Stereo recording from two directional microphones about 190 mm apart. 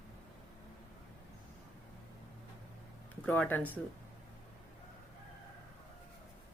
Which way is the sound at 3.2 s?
5° left (ahead or behind).